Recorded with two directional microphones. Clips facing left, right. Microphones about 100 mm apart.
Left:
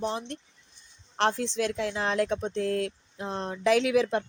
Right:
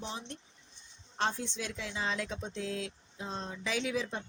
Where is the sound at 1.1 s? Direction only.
85° left.